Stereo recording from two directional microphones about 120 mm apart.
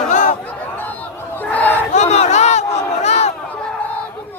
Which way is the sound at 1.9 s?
70° left (ahead or behind).